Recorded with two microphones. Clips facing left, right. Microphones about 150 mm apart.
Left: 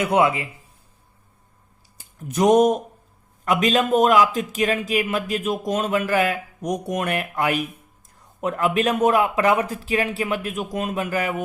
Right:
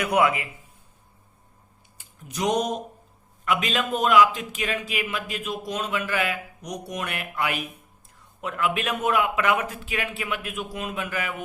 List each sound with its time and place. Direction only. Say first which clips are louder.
0.0 s a man's voice: left 3 dB; 25° left (ahead or behind)
2.0 s a man's voice: left 8 dB; 50° left (ahead or behind)